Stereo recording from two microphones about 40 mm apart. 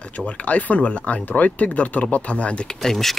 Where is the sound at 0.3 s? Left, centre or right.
Left.